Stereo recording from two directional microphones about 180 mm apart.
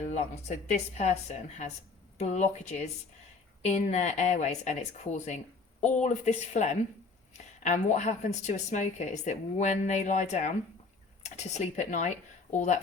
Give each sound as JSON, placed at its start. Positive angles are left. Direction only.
{"t": 0.0, "sound": "speech", "side_deg": 40}
{"t": 2.1, "sound": "a woman's voice", "side_deg": 40}